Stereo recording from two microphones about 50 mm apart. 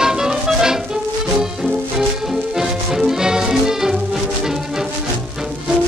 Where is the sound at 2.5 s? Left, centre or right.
Centre.